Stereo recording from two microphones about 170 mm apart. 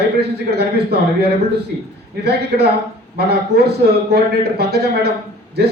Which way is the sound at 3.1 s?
70° right (ahead or behind).